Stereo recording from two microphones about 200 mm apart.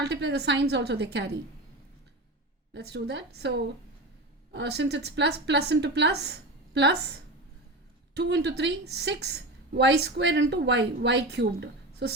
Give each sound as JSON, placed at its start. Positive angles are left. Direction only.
{"t": 0.0, "sound": "a woman's voice", "side_deg": -55}
{"t": 2.7, "sound": "a woman's voice", "side_deg": -60}